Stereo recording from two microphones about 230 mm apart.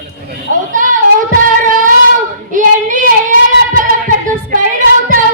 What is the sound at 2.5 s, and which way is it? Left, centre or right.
Female singing, right.